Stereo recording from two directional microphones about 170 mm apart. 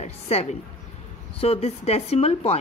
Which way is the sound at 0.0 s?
40° left (ahead or behind).